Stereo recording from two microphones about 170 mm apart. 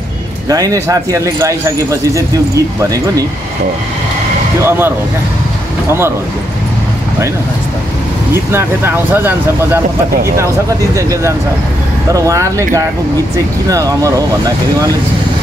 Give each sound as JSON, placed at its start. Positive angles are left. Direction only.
{"t": 0.5, "sound": "speech", "side_deg": -20}
{"t": 4.6, "sound": "speech", "side_deg": -15}
{"t": 8.3, "sound": "speech", "side_deg": -15}